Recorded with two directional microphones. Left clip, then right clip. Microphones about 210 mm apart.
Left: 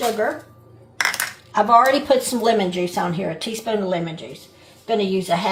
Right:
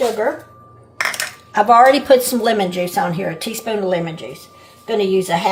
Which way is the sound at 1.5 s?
40° right (ahead or behind).